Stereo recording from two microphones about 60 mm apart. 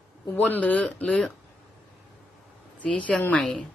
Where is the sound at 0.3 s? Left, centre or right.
Left.